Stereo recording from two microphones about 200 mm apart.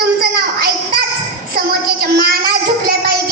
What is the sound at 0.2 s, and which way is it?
Child singing, 50° right (ahead or behind).